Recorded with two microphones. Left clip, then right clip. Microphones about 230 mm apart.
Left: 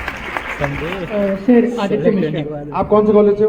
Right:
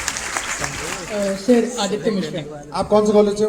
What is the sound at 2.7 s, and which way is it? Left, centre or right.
Speech, right.